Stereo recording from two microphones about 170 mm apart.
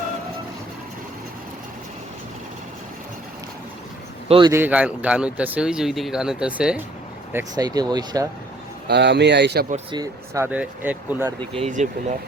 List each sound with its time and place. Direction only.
4.3 s speech: 30° right (ahead or behind)
4.5 s speech: 10° right (ahead or behind)
7.3 s speech: 20° right (ahead or behind)
8.9 s speech: 80° right
9.9 s speech: 20° right (ahead or behind)
11.7 s speech: 45° right (ahead or behind)